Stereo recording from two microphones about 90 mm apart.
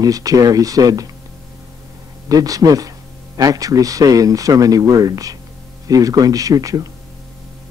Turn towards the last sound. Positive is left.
turn(degrees=-40)  # may be behind; listen again after turning